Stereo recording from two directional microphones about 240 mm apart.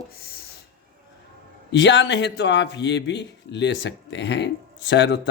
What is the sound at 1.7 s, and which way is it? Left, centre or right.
Speech, left.